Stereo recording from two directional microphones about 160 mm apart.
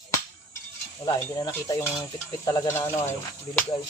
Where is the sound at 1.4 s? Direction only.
20° left (ahead or behind).